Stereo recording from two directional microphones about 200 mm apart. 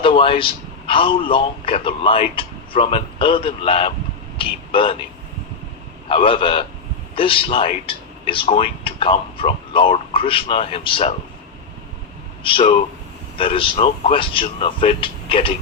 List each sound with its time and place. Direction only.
0.0 s a man's voice: 25° left (ahead or behind)
6.1 s speech: 25° left (ahead or behind)
12.4 s speech: 25° left (ahead or behind)